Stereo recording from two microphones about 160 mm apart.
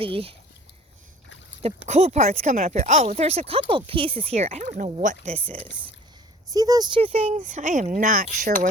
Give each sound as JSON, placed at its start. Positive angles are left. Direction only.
{"t": 0.0, "sound": "speech", "side_deg": -35}
{"t": 1.6, "sound": "speech", "side_deg": -40}
{"t": 6.5, "sound": "speech", "side_deg": -20}